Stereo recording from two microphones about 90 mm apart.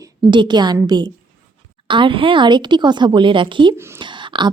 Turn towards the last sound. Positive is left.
turn(degrees=-60)  # may be behind; listen again after turning